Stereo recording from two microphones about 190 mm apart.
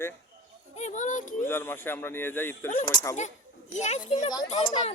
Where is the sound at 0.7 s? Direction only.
40° left (ahead or behind).